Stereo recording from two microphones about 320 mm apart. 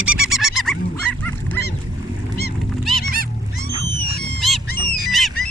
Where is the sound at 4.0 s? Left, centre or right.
Left.